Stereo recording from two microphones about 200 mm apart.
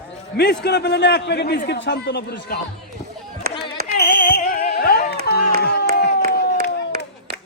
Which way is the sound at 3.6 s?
55° left (ahead or behind).